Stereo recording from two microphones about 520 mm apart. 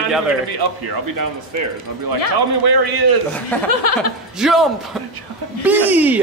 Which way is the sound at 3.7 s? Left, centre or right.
Left.